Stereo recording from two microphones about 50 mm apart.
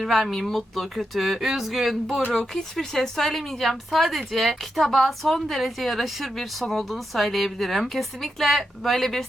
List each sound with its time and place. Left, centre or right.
0.0 s speech: centre